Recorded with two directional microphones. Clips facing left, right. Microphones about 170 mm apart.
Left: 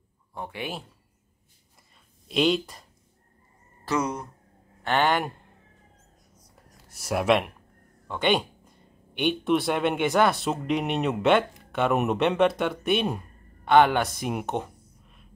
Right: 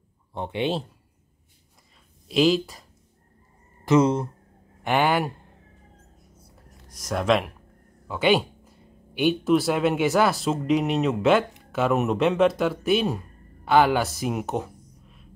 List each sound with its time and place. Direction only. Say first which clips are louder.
0.3 s a man's voice: right 8 dB; 25° right (ahead or behind)
2.2 s speech: right 3 dB; centre (ahead or behind)
3.8 s speech: right 8 dB; 25° right (ahead or behind)
4.8 s speech: right 2 dB; 10° right (ahead or behind)
6.9 s speech: even; 10° left (ahead or behind)
14.8 s a sound: right 4 dB; centre (ahead or behind)